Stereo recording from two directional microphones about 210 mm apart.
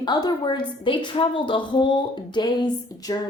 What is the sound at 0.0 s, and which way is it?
Speech, 20° left (ahead or behind).